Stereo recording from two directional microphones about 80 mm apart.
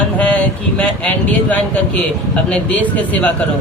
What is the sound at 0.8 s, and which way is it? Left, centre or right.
Speech, centre.